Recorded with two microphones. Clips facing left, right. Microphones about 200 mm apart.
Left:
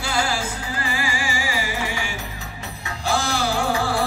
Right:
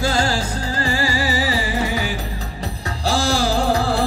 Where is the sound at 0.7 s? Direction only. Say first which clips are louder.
Right 6 dB; 35° right (ahead or behind).